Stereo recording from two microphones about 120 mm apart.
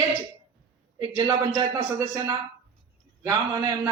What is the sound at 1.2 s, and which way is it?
A man's voice, 25° right (ahead or behind).